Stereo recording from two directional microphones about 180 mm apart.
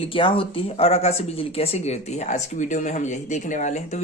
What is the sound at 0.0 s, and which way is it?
Speech, 30° left (ahead or behind).